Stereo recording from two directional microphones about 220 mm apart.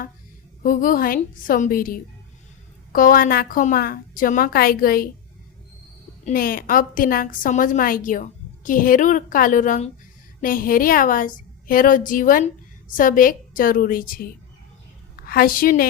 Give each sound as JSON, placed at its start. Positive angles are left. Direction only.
{"t": 0.6, "sound": "a woman's voice", "side_deg": 40}
{"t": 6.2, "sound": "a woman's voice", "side_deg": 40}